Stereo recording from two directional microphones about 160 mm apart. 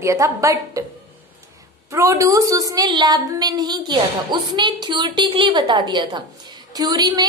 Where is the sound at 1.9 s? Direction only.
20° right (ahead or behind).